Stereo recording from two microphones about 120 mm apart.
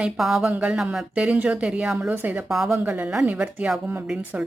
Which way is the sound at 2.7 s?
15° right (ahead or behind).